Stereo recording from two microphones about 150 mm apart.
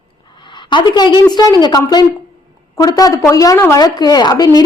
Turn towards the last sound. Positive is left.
turn(degrees=25)  # may be behind; listen again after turning